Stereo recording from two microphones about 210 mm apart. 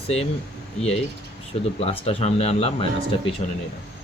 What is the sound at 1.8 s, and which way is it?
Speech, 25° left (ahead or behind).